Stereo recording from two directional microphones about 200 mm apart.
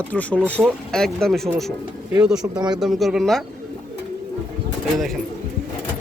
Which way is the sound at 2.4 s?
20° right (ahead or behind).